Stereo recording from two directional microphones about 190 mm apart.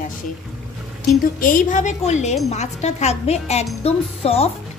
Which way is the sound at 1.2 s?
45° left (ahead or behind).